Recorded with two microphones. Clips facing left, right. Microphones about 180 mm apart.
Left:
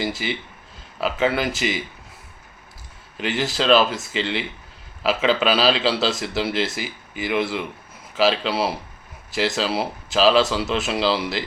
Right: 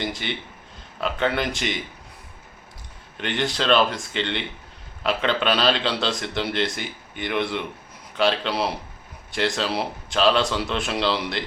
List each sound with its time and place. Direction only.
0.0 s a man's voice: 5° left (ahead or behind)
3.2 s a man's voice: 5° left (ahead or behind)